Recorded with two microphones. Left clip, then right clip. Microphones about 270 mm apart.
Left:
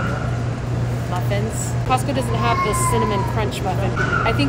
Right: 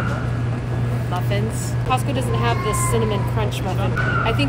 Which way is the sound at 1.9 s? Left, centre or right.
Centre.